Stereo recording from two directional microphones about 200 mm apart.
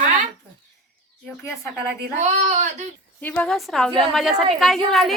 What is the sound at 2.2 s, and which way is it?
Speech, 35° right (ahead or behind).